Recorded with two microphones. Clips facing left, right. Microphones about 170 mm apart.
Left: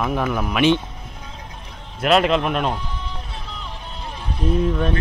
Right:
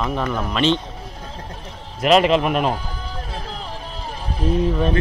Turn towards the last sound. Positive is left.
turn(degrees=-5)  # may be behind; listen again after turning